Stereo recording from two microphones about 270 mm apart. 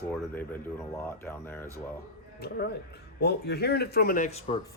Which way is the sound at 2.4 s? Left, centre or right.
Left.